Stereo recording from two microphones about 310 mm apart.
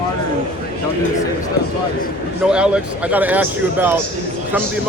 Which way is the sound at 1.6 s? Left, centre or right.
Left.